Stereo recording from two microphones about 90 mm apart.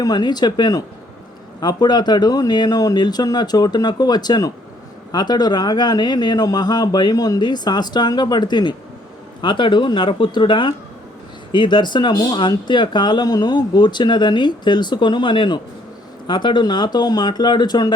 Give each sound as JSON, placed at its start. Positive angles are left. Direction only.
{"t": 0.0, "sound": "speech", "side_deg": 50}